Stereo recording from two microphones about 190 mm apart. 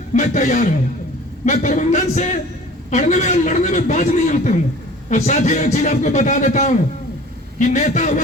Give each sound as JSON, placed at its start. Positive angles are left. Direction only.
{"t": 0.1, "sound": "a man's voice", "side_deg": 40}